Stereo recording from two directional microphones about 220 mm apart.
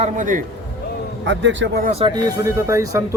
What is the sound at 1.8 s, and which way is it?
Speech, 25° right (ahead or behind).